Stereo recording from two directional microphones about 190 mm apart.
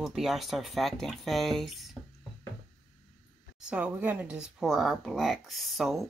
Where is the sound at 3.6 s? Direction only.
5° right (ahead or behind).